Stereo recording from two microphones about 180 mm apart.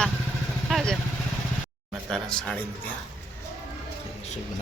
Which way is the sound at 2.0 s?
5° left (ahead or behind).